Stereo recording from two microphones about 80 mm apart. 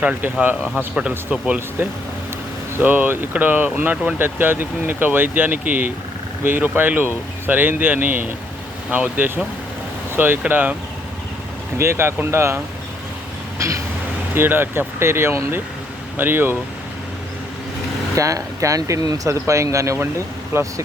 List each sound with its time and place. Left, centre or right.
0.0 s speech: centre
11.8 s speech: right
14.3 s speech: right
18.2 s speech: right